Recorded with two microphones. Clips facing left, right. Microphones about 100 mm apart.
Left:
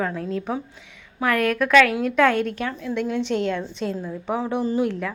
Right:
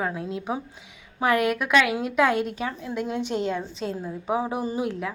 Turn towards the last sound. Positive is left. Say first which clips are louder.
# left 4 dB
turn(degrees=-10)  # may be behind; listen again after turning